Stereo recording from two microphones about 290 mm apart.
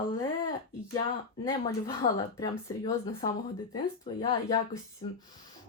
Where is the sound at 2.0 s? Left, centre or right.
Left.